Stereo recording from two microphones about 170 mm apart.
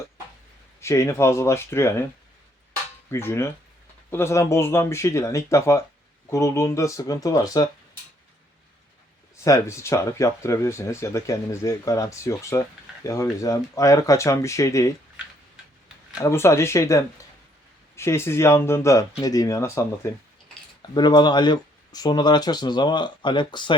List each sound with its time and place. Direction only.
0.8 s speech: 15° left (ahead or behind)
3.1 s speech: 15° left (ahead or behind)
9.4 s speech: 15° left (ahead or behind)
16.1 s speech: 15° left (ahead or behind)